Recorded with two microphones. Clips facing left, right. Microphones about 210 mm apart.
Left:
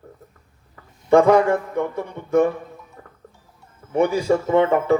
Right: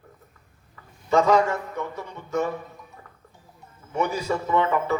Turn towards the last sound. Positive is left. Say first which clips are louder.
# left 6 dB
turn(degrees=55)  # may be behind; listen again after turning